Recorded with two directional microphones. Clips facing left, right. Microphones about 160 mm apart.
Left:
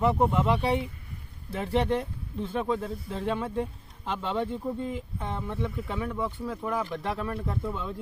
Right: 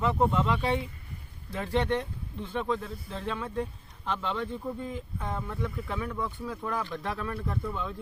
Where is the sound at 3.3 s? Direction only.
30° left (ahead or behind).